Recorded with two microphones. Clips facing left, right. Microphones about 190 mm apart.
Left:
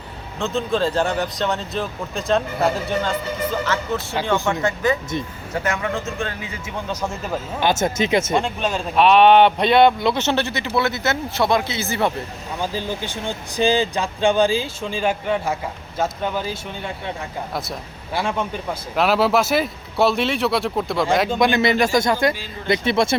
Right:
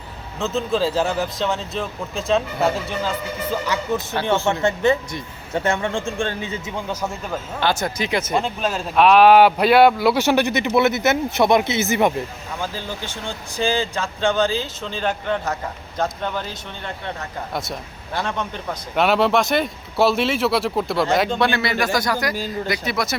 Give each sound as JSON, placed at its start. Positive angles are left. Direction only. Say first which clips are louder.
{"t": 0.3, "sound": "speech", "louder": "even", "side_deg": 0}
{"t": 3.9, "sound": "speech", "louder": "right 2 dB", "side_deg": -15}
{"t": 4.6, "sound": "speech", "louder": "right 2 dB", "side_deg": -25}
{"t": 7.6, "sound": "speech", "louder": "left 3 dB", "side_deg": 20}
{"t": 8.4, "sound": "speech", "louder": "left 1 dB", "side_deg": 0}
{"t": 12.7, "sound": "speech", "louder": "left 4 dB", "side_deg": 15}
{"t": 21.3, "sound": "speech", "louder": "left 3 dB", "side_deg": 15}